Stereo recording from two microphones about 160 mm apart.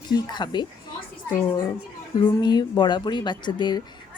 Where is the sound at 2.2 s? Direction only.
25° left (ahead or behind).